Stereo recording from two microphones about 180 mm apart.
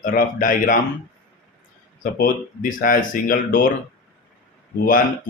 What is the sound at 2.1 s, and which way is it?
Speech, 50° left (ahead or behind).